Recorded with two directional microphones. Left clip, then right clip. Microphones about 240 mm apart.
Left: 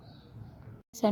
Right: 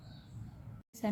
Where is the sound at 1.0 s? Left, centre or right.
Left.